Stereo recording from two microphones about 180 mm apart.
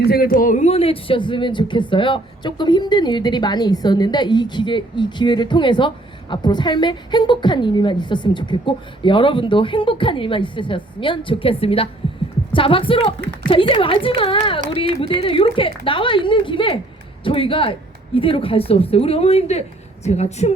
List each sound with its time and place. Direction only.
0.0 s a woman's voice: 60° left (ahead or behind); by 20.5 s 40° left (ahead or behind)